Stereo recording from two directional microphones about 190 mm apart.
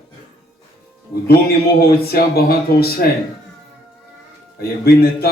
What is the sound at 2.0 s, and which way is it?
A man's voice, 55° left (ahead or behind).